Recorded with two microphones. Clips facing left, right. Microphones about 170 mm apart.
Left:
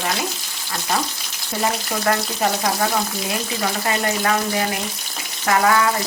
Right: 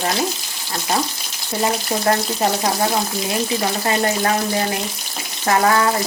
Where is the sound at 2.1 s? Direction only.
25° right (ahead or behind).